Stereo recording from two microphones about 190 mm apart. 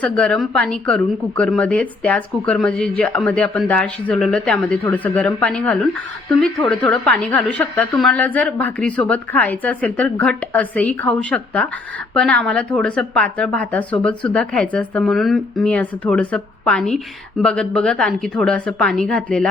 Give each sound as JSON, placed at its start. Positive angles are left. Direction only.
{"t": 0.0, "sound": "a woman's voice", "side_deg": 5}